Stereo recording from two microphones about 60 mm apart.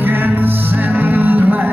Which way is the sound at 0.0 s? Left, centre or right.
Right.